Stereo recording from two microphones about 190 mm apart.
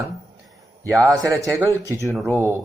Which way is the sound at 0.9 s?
15° right (ahead or behind).